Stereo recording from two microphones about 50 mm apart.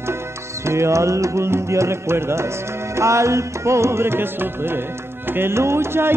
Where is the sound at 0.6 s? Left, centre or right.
Right.